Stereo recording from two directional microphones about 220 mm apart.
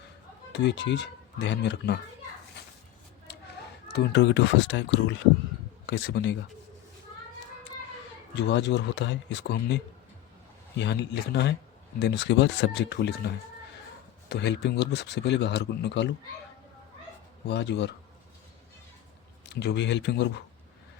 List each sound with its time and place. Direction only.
0.5 s speech: 50° left (ahead or behind)
3.9 s speech: 50° left (ahead or behind)
8.4 s speech: 50° left (ahead or behind)
17.4 s speech: 50° left (ahead or behind)
19.5 s speech: 50° left (ahead or behind)